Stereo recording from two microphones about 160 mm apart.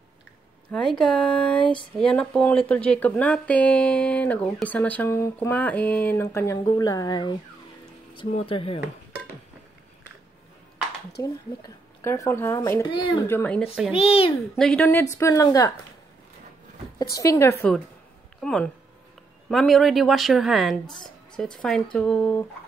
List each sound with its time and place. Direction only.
0.7 s speech: 5° left (ahead or behind); by 7.3 s 25° left (ahead or behind)
8.3 s speech: 40° left (ahead or behind)
11.2 s speech: 20° left (ahead or behind)
13.3 s speech: 10° left (ahead or behind)
13.9 s speech: 40° left (ahead or behind)
14.6 s speech: 5° left (ahead or behind); by 15.7 s 20° left (ahead or behind)
17.1 s speech: 20° left (ahead or behind)
18.4 s speech: 5° left (ahead or behind)